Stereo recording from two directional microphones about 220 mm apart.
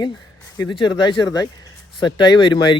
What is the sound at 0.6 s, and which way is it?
Speech, 20° left (ahead or behind).